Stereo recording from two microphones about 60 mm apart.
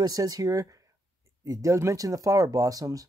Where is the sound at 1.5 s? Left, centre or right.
Right.